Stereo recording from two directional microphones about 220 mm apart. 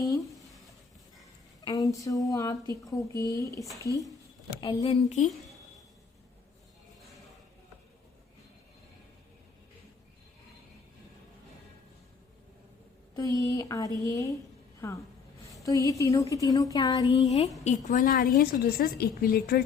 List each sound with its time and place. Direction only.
0.0 s speech: 15° left (ahead or behind)
1.6 s speech: 15° left (ahead or behind)
4.6 s speech: 25° left (ahead or behind)
13.1 s a woman's voice: 15° left (ahead or behind); by 19.6 s 45° left (ahead or behind)